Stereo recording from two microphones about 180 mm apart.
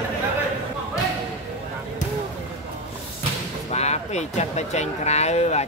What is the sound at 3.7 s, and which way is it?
Speech, 40° left (ahead or behind).